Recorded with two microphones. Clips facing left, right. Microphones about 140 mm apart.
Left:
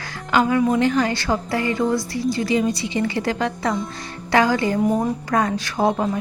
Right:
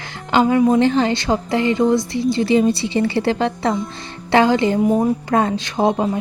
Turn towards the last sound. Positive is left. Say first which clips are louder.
# right 2 dB
turn(degrees=-20)  # may be behind; listen again after turning